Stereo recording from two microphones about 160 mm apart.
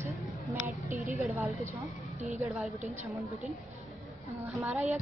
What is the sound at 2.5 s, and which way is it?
Speech, centre (ahead or behind).